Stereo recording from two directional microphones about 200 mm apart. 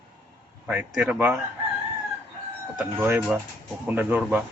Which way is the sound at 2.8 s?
10° right (ahead or behind).